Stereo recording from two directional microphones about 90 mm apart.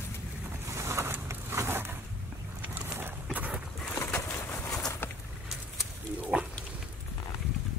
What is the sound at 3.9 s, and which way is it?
Bird, 30° left (ahead or behind).